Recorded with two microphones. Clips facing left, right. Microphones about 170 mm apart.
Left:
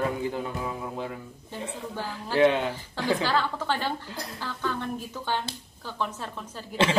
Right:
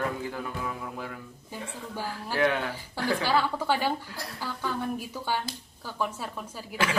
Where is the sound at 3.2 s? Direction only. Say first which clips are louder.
Right 1 dB; 10° right (ahead or behind).